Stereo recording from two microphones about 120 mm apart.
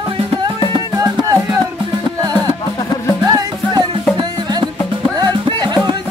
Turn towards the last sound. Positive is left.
turn(degrees=-35)  # may be behind; listen again after turning